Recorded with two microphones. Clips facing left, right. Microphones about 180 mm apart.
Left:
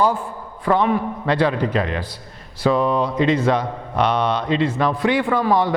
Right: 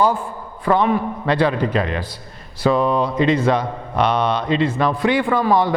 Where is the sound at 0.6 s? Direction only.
15° right (ahead or behind).